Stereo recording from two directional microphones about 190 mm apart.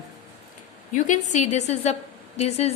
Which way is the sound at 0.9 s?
40° left (ahead or behind).